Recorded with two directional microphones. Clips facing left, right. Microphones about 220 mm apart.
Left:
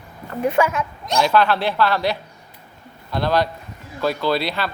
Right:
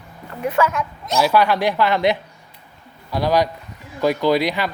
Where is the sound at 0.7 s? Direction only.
Centre (ahead or behind).